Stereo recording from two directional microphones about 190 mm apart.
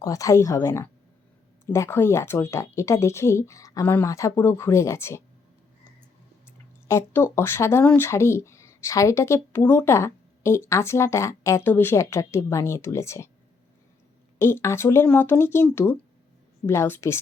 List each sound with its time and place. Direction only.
0.0 s speech: 15° left (ahead or behind)
6.8 s speech: 15° left (ahead or behind)
14.3 s speech: 10° left (ahead or behind)